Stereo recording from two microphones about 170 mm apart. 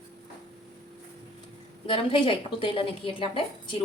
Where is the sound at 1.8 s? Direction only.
30° left (ahead or behind).